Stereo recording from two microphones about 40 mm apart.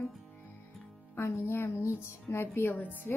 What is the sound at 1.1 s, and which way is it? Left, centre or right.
Speech, left.